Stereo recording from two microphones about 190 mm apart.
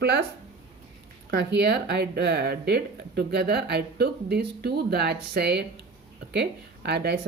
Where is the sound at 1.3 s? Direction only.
65° right (ahead or behind).